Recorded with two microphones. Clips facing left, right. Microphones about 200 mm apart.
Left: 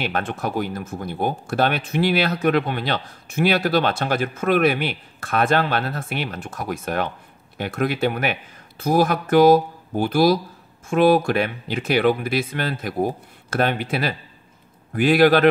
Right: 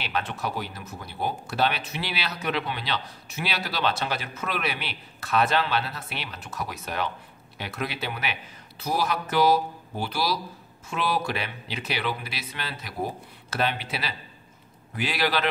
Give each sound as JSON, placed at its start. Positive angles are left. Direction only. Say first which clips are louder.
{"t": 0.0, "sound": "speech", "louder": "left 5 dB", "side_deg": 50}